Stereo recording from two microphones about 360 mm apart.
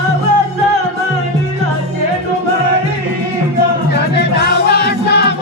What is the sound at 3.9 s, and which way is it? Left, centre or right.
Music, left.